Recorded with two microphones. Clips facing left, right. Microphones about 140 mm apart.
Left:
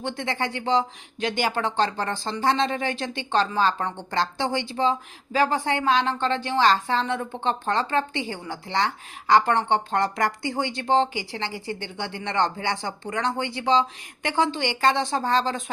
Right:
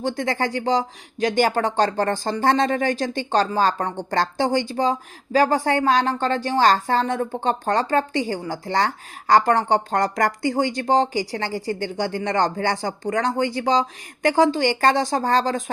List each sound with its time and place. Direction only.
0.0 s speech: 40° right (ahead or behind)